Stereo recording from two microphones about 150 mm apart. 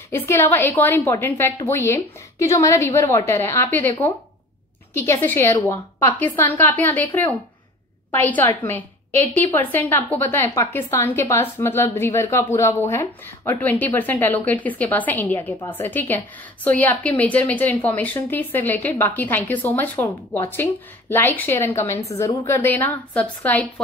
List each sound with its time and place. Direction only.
0.1 s a woman's voice: 15° left (ahead or behind)
4.9 s a woman's voice: 15° left (ahead or behind)
8.1 s a woman's voice: 10° left (ahead or behind)